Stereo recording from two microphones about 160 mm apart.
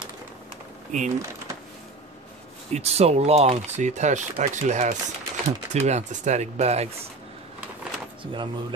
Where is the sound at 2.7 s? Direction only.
40° right (ahead or behind).